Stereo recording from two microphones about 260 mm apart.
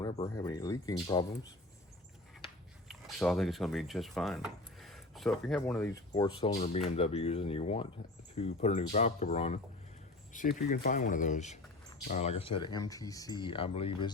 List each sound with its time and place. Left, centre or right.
0.0 s a sound: left
0.3 s speech: centre
3.2 s speech: centre
6.1 s speech: centre